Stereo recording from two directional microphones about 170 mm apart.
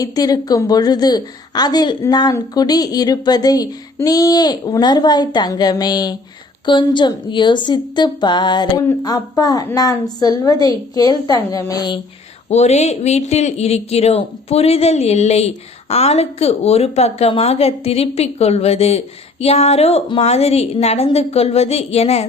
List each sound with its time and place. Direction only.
0.0 s a woman's voice: 20° left (ahead or behind)
12.5 s a man's voice: 40° left (ahead or behind)